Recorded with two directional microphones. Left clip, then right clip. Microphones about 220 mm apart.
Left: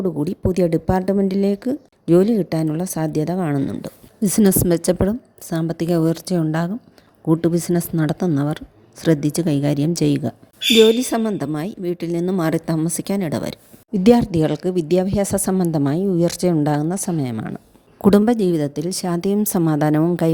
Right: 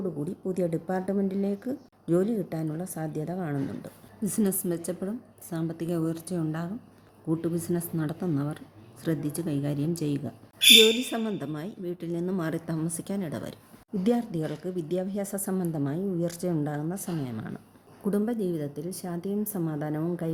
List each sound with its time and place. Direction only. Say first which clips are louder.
0.3 s a woman's voice: left 11 dB; 40° left (ahead or behind)